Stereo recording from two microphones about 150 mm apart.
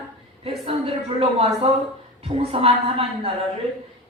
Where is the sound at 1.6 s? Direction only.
40° right (ahead or behind).